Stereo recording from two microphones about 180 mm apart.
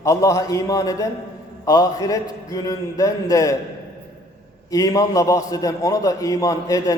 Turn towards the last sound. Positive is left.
turn(degrees=20)  # may be behind; listen again after turning